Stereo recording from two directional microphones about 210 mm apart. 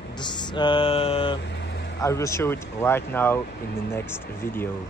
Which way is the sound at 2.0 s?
15° left (ahead or behind).